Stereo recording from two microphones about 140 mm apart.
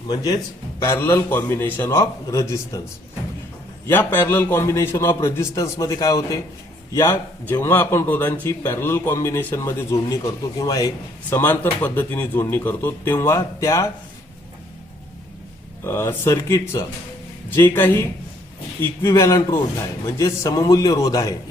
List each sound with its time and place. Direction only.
0.1 s a man's voice: 30° left (ahead or behind)
0.8 s a man's voice: 15° left (ahead or behind)
3.8 s a man's voice: 15° left (ahead or behind)
15.8 s a man's voice: 20° left (ahead or behind)